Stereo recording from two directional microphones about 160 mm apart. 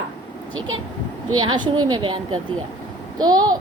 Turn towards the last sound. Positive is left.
turn(degrees=-25)  # may be behind; listen again after turning